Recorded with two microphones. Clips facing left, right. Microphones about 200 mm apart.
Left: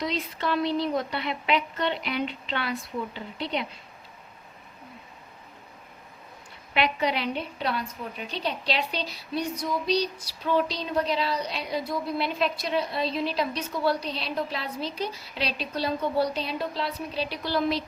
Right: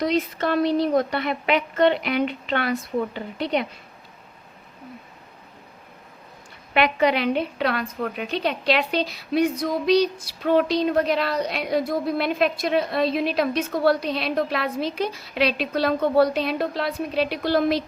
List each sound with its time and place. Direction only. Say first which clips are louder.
0.0 s a woman's voice: right 7 dB; 50° right (ahead or behind)
6.7 s a woman's voice: right 6 dB; 55° right (ahead or behind)